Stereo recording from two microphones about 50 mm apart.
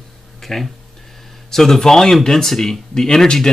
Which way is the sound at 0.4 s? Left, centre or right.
Centre.